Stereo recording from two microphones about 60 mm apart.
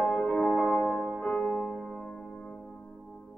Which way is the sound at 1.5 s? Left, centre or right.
Centre.